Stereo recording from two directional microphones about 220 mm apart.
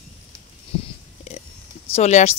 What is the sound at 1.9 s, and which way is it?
Speech, 30° left (ahead or behind).